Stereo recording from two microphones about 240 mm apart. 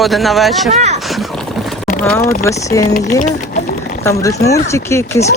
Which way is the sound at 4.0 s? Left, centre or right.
Centre.